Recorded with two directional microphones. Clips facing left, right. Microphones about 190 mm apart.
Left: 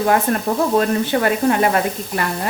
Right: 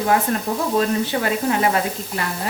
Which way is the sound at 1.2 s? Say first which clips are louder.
Left 5 dB; 55° left (ahead or behind).